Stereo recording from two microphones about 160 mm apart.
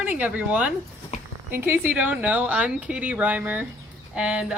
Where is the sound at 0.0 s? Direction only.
10° right (ahead or behind).